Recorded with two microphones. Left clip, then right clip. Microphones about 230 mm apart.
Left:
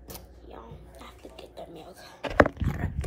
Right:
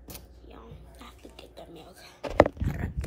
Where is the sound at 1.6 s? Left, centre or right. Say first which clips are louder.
Left 4 dB; centre.